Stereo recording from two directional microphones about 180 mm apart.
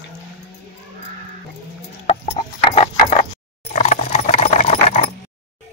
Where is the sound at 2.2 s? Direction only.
40° left (ahead or behind).